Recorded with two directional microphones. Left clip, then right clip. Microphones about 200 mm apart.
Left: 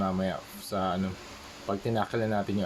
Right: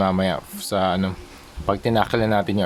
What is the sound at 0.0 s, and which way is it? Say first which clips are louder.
Speech: right 10 dB; 40° right (ahead or behind).